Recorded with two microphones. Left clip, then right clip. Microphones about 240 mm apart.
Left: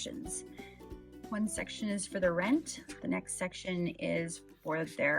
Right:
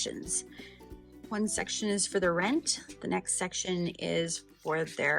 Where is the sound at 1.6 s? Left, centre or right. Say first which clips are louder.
Right 6 dB; centre.